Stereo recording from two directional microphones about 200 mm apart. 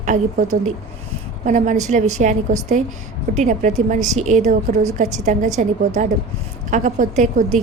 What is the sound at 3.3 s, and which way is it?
A woman's voice, 35° right (ahead or behind).